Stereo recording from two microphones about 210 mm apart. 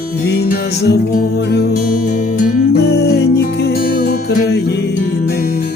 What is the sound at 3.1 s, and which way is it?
Music, 50° left (ahead or behind).